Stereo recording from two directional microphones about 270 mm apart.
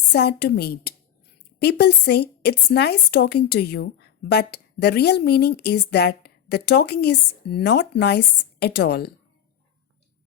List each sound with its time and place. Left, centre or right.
0.1 s a woman's voice: left